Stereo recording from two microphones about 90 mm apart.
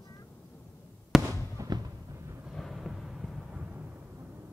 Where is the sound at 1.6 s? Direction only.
35° right (ahead or behind).